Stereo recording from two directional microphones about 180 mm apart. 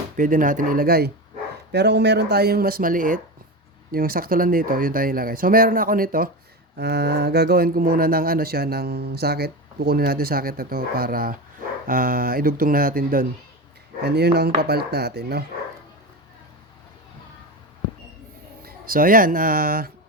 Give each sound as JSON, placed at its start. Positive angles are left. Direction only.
{"t": 0.2, "sound": "speech", "side_deg": -50}
{"t": 1.7, "sound": "speech", "side_deg": -70}
{"t": 6.7, "sound": "speech", "side_deg": -65}
{"t": 14.0, "sound": "speech", "side_deg": -65}
{"t": 18.6, "sound": "speech", "side_deg": -50}